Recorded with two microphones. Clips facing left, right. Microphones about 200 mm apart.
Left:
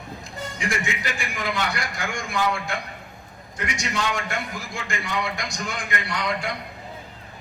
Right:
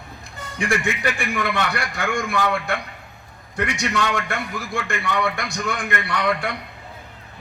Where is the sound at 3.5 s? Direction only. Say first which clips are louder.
Right 5 dB; 60° right (ahead or behind).